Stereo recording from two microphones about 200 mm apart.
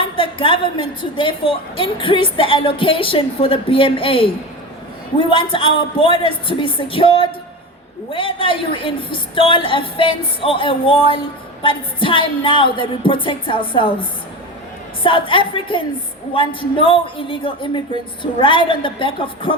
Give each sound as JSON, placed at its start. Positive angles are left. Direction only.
{"t": 0.0, "sound": "a woman's voice", "side_deg": 25}
{"t": 15.0, "sound": "a woman's voice", "side_deg": 25}